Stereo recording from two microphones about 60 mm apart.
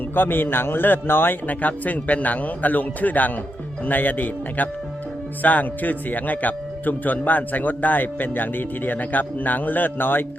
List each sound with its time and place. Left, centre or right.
0.1 s speech: left